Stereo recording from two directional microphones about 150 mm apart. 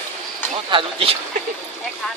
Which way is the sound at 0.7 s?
35° right (ahead or behind).